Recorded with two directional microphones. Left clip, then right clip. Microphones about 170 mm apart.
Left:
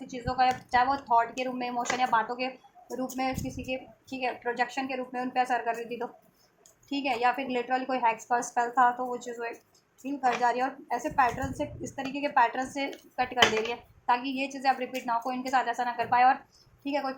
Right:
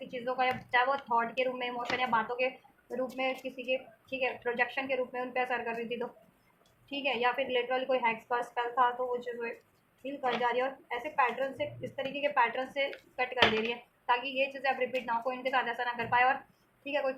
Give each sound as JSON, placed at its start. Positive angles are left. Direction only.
{"t": 0.1, "sound": "a woman's voice", "side_deg": 40}